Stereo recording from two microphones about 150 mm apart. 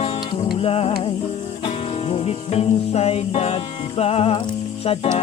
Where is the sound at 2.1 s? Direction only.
40° left (ahead or behind).